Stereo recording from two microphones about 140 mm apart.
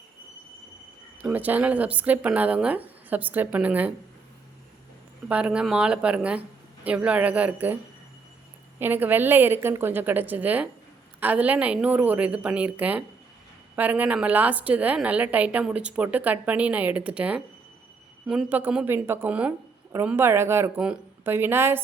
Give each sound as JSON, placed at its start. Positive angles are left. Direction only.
{"t": 1.2, "sound": "a woman's voice", "side_deg": -10}
{"t": 5.3, "sound": "a woman's voice", "side_deg": -10}
{"t": 8.8, "sound": "a woman's voice", "side_deg": -15}